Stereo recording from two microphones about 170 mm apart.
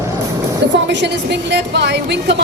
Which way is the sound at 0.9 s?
90° right.